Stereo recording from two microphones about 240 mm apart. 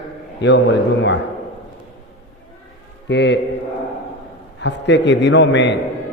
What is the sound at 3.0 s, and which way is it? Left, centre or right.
Speech, left.